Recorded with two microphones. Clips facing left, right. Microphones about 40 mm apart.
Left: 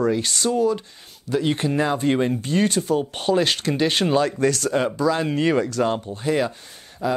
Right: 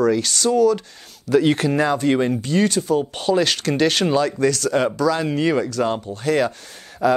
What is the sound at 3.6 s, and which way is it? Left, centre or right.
Speech, right.